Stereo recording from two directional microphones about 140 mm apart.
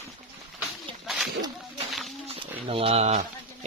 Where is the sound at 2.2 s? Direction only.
45° right (ahead or behind).